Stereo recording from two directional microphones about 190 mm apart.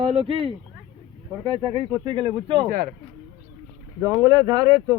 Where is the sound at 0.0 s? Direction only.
30° right (ahead or behind).